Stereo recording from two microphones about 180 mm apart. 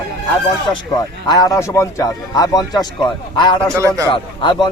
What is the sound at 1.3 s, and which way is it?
Speech, 20° left (ahead or behind).